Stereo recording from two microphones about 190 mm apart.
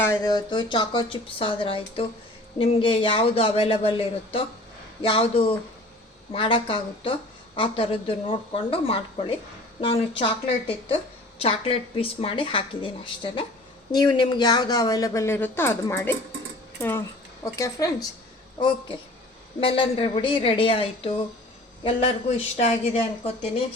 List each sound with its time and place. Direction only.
0.0 s a woman's voice: 15° left (ahead or behind)
17.4 s speech: 15° left (ahead or behind)
19.5 s a woman's voice: 30° left (ahead or behind)
22.5 s a woman's voice: 30° left (ahead or behind)